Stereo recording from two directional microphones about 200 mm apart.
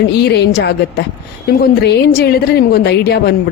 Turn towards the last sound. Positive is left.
turn(degrees=55)  # may be behind; listen again after turning